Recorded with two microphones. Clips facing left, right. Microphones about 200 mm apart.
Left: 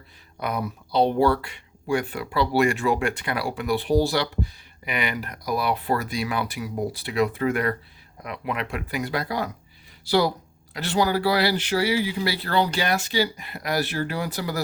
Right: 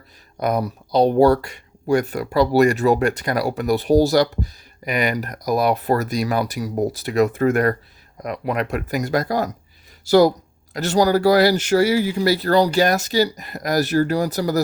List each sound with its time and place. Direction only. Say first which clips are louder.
0.3 s speech: right 7 dB; 40° right (ahead or behind)